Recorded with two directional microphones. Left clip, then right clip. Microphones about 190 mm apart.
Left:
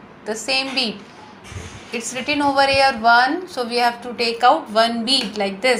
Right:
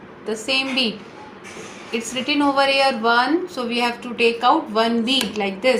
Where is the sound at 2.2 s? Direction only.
40° left (ahead or behind).